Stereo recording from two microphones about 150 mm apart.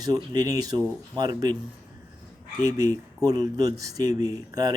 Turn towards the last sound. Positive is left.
turn(degrees=-25)  # may be behind; listen again after turning